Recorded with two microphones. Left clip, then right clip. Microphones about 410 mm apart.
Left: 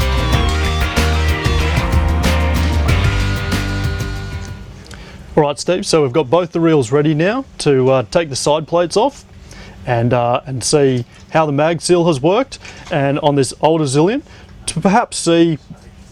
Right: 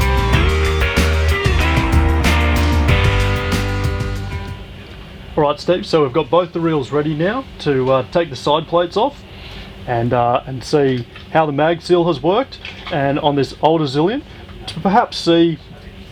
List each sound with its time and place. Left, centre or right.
0.0 s music: centre
5.3 s speech: left